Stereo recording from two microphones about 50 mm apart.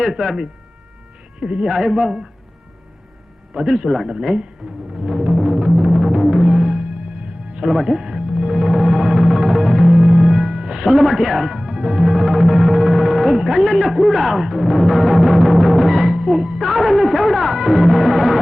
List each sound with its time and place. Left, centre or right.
0.0 s speech: centre
1.6 s speech: centre
3.5 s speech: centre
4.9 s music: centre
10.9 s speech: centre
11.5 s music: centre